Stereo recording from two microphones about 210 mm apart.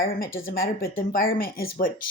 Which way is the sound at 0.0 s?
45° left (ahead or behind).